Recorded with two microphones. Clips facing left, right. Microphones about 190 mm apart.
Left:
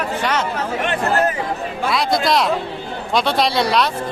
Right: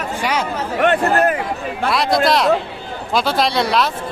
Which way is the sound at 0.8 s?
60° right (ahead or behind).